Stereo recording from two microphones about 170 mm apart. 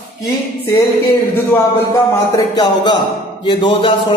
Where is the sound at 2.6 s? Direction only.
25° left (ahead or behind).